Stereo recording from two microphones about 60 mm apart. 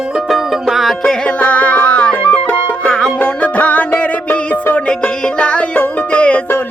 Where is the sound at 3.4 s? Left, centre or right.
Left.